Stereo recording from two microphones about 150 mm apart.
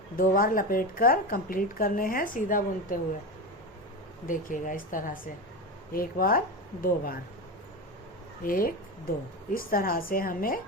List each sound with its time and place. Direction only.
0.2 s a woman's voice: 70° left (ahead or behind)
4.3 s a woman's voice: 60° left (ahead or behind)
8.4 s a woman's voice: 70° left (ahead or behind)